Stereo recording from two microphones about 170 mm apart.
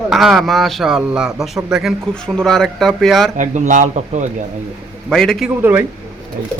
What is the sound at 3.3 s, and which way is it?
Speech, 45° right (ahead or behind).